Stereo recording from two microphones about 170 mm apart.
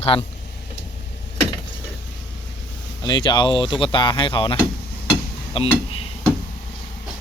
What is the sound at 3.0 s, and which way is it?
Speech, 25° left (ahead or behind).